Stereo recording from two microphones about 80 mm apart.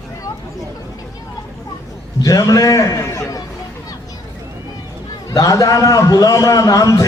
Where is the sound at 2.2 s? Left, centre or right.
Left.